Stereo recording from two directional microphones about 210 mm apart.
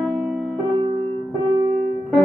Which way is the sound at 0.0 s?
Centre (ahead or behind).